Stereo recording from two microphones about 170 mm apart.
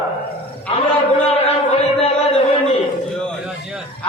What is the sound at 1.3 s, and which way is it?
Chant, 35° left (ahead or behind).